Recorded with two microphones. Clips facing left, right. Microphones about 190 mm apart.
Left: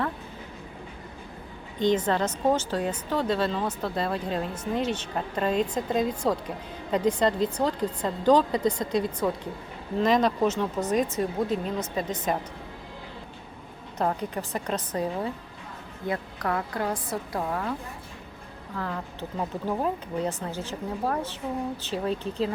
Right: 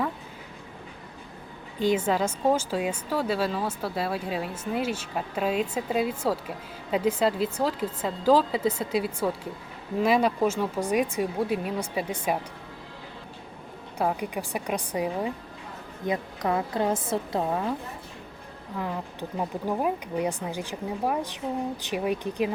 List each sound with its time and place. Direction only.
1.8 s speech: 10° right (ahead or behind)
14.0 s a woman's voice: 10° right (ahead or behind)
18.8 s speech: 15° right (ahead or behind)